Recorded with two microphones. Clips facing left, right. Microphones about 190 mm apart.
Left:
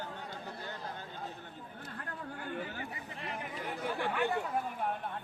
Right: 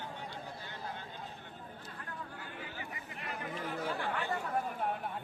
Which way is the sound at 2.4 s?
50° left (ahead or behind).